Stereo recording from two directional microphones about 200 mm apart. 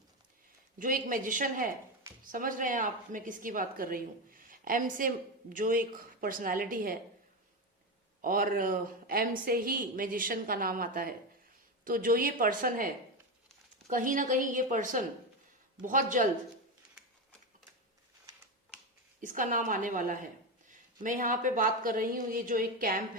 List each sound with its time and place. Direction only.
0.8 s a woman's voice: 45° right (ahead or behind)
8.2 s a woman's voice: 45° right (ahead or behind)
19.2 s a woman's voice: 40° right (ahead or behind)